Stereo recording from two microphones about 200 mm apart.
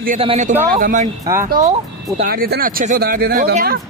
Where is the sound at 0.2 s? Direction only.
35° right (ahead or behind).